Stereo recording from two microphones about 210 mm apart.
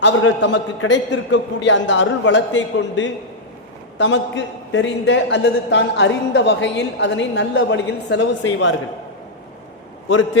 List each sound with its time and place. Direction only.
0.0 s a man's voice: 65° left (ahead or behind)